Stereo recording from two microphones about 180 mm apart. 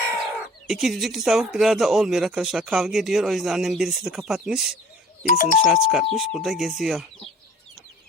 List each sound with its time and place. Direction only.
0.7 s speech: centre (ahead or behind)
5.2 s speech: 50° left (ahead or behind)
5.6 s speech: 5° right (ahead or behind)